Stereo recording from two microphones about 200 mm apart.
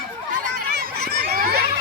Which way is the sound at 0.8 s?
50° right (ahead or behind).